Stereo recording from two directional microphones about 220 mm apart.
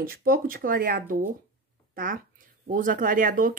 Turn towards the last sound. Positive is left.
turn(degrees=-35)  # may be behind; listen again after turning